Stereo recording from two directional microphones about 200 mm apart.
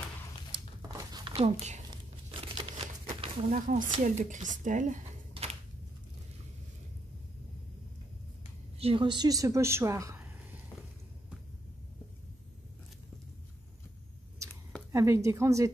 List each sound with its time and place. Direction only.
0.5 s a sound: 20° right (ahead or behind)
2.4 s crumpling: 25° right (ahead or behind)
3.5 s speech: 40° right (ahead or behind)
5.3 s a sound: 30° right (ahead or behind)
8.7 s a woman's voice: 25° right (ahead or behind)
14.9 s a woman's voice: 15° right (ahead or behind)